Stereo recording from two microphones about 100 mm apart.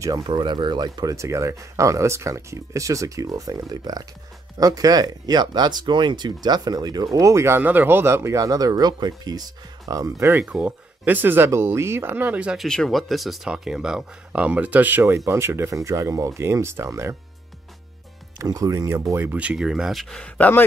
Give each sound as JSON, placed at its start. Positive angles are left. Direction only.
{"t": 0.0, "sound": "speech", "side_deg": -40}
{"t": 10.4, "sound": "speech", "side_deg": -10}
{"t": 12.5, "sound": "speech", "side_deg": 5}
{"t": 18.4, "sound": "speech", "side_deg": -35}
{"t": 19.2, "sound": "speech", "side_deg": -15}